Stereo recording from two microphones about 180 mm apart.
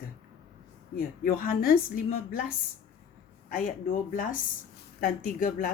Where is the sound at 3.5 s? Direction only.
50° left (ahead or behind).